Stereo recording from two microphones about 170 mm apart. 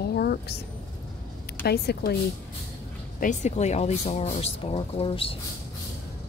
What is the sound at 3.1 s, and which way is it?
Speech, 45° left (ahead or behind).